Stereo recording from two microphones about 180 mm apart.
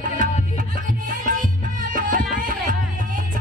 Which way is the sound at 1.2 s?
45° right (ahead or behind).